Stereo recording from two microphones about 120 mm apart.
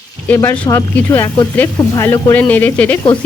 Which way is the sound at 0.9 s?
20° left (ahead or behind).